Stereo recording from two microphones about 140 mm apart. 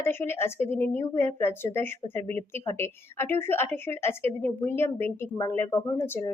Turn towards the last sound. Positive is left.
turn(degrees=15)  # may be behind; listen again after turning